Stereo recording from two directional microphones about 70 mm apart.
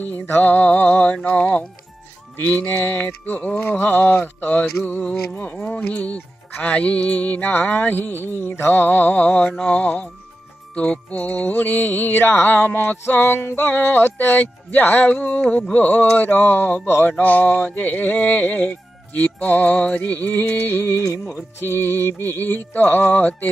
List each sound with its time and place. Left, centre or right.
0.0 s music: left
5.3 s speech: centre
5.8 s music: left
9.7 s speech: centre
10.7 s music: centre